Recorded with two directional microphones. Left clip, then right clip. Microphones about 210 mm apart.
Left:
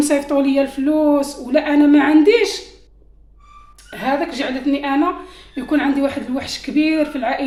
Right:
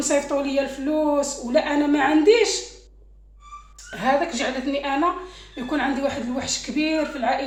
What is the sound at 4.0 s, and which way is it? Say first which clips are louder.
A woman's voice: left 1 dB; 45° left (ahead or behind).